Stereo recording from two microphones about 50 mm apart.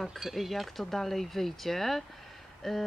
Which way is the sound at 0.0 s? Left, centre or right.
Centre.